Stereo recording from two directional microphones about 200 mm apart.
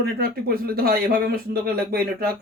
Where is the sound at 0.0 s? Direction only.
50° right (ahead or behind).